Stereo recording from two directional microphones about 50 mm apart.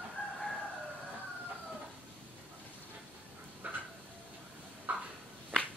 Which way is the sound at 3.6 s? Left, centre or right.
Right.